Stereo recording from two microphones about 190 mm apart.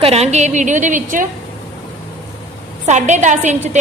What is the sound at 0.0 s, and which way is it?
A woman's voice, 35° right (ahead or behind).